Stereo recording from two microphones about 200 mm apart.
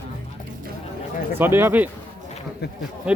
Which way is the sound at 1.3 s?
10° right (ahead or behind).